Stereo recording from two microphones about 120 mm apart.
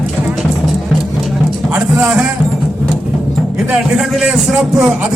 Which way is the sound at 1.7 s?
5° right (ahead or behind).